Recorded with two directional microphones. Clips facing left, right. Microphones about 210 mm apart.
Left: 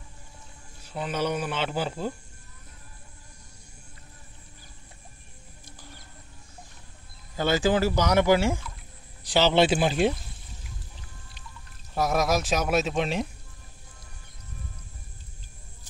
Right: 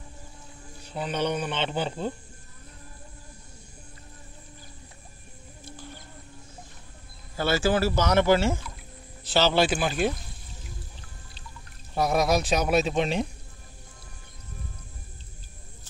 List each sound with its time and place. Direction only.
0.8 s speech: 5° left (ahead or behind)
7.3 s speech: 15° left (ahead or behind)
11.9 s speech: centre (ahead or behind)